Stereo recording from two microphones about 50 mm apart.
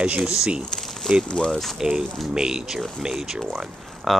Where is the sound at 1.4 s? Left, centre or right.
Centre.